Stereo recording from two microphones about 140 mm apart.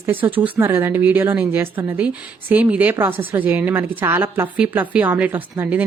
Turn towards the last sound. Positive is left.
turn(degrees=-15)  # may be behind; listen again after turning